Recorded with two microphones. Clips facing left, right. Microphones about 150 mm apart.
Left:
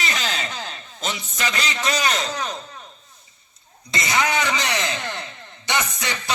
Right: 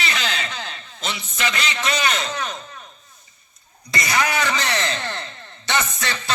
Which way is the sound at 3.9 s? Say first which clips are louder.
Even; 20° left (ahead or behind).